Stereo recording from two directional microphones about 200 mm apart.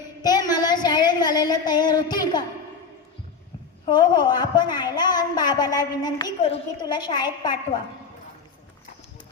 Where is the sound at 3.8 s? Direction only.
20° left (ahead or behind).